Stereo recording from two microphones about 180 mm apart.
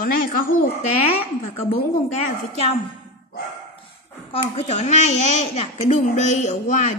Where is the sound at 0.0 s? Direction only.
50° left (ahead or behind).